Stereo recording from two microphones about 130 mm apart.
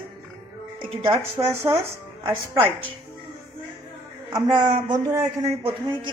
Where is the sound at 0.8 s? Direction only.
40° right (ahead or behind).